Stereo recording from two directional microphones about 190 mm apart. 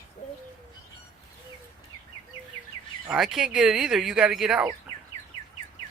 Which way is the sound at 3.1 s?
5° right (ahead or behind).